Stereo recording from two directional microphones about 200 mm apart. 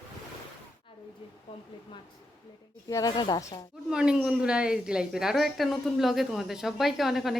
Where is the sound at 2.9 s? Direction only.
15° left (ahead or behind).